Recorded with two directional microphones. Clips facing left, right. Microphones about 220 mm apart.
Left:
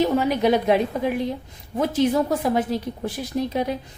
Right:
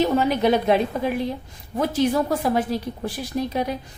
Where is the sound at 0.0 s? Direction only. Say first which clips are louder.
Even; 10° left (ahead or behind).